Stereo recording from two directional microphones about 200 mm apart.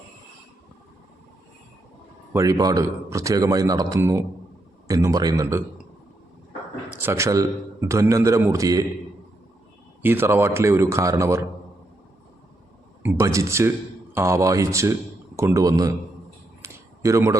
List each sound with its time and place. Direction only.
2.3 s speech: 15° right (ahead or behind)
7.0 s speech: 15° right (ahead or behind)
10.0 s speech: 10° right (ahead or behind)
13.0 s speech: 10° right (ahead or behind)
16.6 s a sound: 15° right (ahead or behind)